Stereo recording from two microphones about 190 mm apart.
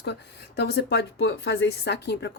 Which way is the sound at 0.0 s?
60° left (ahead or behind).